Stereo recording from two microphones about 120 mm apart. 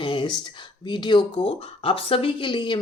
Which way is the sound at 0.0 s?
40° left (ahead or behind).